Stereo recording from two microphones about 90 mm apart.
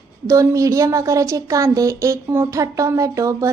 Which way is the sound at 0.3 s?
35° right (ahead or behind).